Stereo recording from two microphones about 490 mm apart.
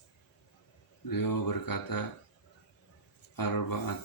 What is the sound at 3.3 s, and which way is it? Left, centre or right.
Speech, left.